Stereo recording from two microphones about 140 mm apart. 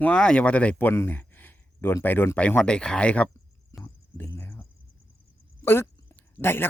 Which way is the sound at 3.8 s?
15° left (ahead or behind).